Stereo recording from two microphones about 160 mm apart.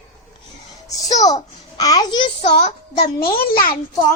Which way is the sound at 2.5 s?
40° left (ahead or behind).